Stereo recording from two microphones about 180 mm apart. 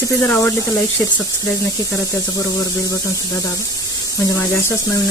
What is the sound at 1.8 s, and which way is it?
Speech, 15° left (ahead or behind).